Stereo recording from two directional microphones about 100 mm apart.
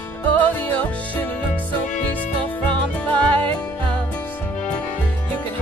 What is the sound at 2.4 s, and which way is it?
Music, 15° left (ahead or behind).